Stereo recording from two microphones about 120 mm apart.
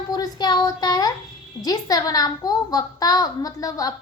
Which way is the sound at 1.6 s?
30° left (ahead or behind).